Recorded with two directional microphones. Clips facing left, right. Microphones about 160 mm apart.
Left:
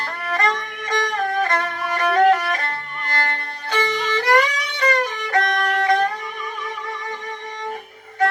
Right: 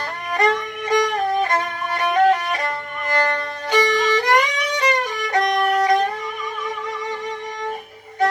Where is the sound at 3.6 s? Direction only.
15° right (ahead or behind).